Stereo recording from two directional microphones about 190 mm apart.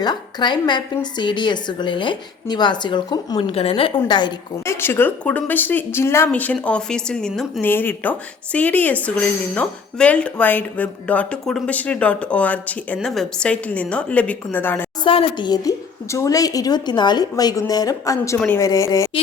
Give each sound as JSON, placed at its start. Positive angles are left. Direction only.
{"t": 0.0, "sound": "speech", "side_deg": 25}
{"t": 3.5, "sound": "speech", "side_deg": 30}
{"t": 15.0, "sound": "speech", "side_deg": 25}